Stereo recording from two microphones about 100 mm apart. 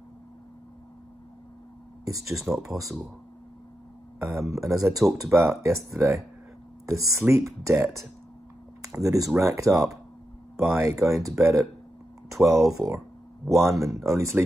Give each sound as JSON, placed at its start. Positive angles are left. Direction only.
{"t": 2.0, "sound": "speech", "side_deg": -35}
{"t": 2.4, "sound": "speech", "side_deg": 0}
{"t": 4.3, "sound": "speech", "side_deg": -30}
{"t": 4.7, "sound": "speech", "side_deg": 0}
{"t": 5.1, "sound": "speech", "side_deg": -30}